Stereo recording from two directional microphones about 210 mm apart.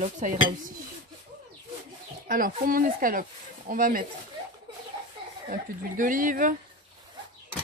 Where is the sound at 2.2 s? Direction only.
40° right (ahead or behind).